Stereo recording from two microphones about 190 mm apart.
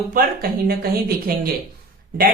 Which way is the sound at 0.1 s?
50° right (ahead or behind).